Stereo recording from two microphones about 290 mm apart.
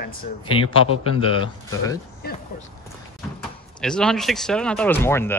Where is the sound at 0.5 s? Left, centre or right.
Centre.